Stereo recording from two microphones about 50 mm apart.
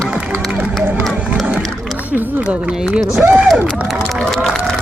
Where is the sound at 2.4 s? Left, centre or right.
Right.